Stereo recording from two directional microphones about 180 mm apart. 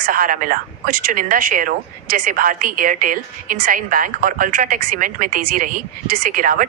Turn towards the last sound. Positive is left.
turn(degrees=-50)  # may be behind; listen again after turning